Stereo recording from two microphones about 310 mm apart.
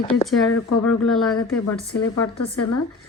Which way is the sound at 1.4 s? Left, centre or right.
Left.